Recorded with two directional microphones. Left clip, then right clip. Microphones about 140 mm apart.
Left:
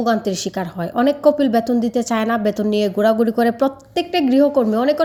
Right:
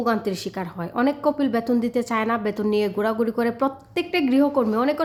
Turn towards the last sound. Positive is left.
turn(degrees=25)  # may be behind; listen again after turning